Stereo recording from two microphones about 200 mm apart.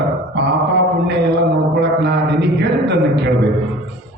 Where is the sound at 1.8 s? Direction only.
60° right (ahead or behind).